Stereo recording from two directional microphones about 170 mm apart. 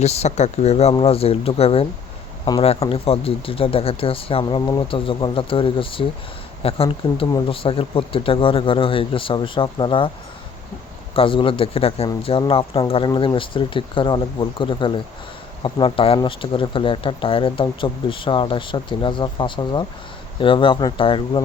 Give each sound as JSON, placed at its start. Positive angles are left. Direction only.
{"t": 0.0, "sound": "speech", "side_deg": 40}
{"t": 11.1, "sound": "speech", "side_deg": 30}